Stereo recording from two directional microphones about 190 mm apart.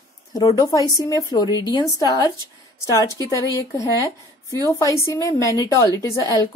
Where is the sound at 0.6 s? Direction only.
20° left (ahead or behind).